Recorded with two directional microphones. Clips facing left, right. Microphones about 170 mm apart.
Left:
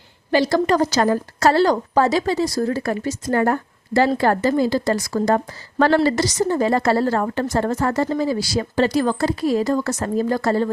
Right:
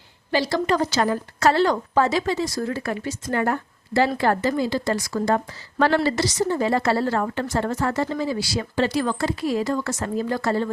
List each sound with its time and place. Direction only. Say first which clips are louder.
0.3 s a woman's voice: left 4 dB; 50° left (ahead or behind)